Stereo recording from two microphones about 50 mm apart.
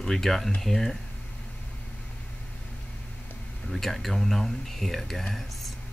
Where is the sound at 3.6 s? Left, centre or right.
Centre.